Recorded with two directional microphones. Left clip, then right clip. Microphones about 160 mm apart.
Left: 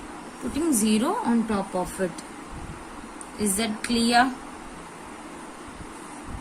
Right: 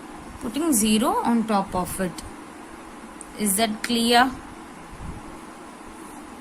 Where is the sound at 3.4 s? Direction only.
45° right (ahead or behind).